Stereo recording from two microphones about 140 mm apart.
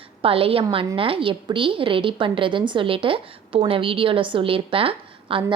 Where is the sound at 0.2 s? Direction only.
40° right (ahead or behind).